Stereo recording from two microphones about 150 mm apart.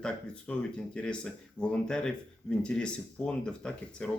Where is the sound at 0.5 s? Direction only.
10° left (ahead or behind).